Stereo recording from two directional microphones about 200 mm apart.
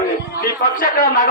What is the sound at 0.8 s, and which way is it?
Speech, 40° left (ahead or behind).